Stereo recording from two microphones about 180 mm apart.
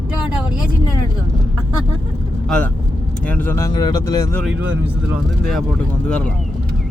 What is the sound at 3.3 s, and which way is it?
Speech, 10° left (ahead or behind).